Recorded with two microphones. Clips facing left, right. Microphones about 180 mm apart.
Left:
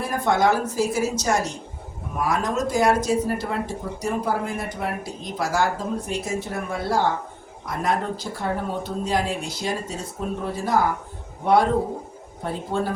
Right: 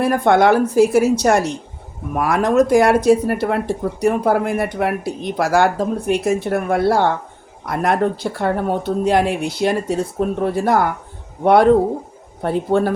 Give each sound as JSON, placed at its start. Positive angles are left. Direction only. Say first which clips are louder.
{"t": 0.0, "sound": "speech", "louder": "right 7 dB", "side_deg": -65}